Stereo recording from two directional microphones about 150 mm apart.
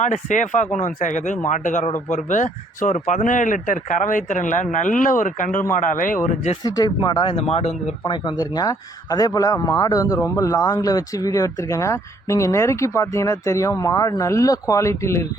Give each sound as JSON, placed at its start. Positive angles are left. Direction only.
{"t": 0.0, "sound": "speech", "side_deg": 55}
{"t": 6.7, "sound": "speech", "side_deg": 25}